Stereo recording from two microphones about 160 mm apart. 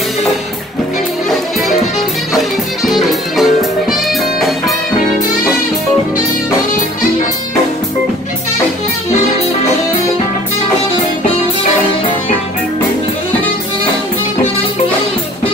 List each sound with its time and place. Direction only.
2.3 s music: centre (ahead or behind)